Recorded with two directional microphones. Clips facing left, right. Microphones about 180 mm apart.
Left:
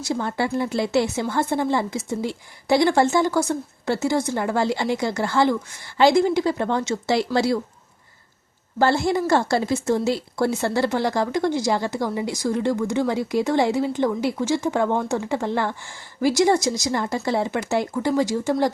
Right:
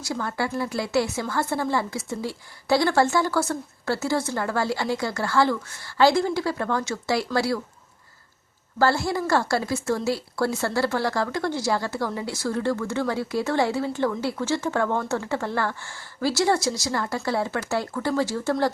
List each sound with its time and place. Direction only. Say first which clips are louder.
0.0 s a woman's voice: left 4 dB; 25° left (ahead or behind)
8.8 s speech: left 3 dB; 20° left (ahead or behind)